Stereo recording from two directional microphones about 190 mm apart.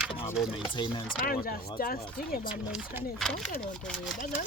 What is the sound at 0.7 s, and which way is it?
Speech, 25° left (ahead or behind).